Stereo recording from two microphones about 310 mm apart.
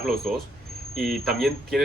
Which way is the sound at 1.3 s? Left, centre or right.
Centre.